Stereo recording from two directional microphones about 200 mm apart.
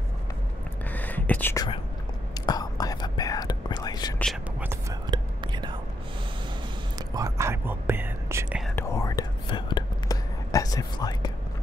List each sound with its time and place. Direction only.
0.8 s whispering: 10° left (ahead or behind)
4.2 s whispering: centre (ahead or behind)
4.6 s whispering: 20° right (ahead or behind)
7.2 s whispering: 15° right (ahead or behind)
8.7 s whispering: 15° left (ahead or behind)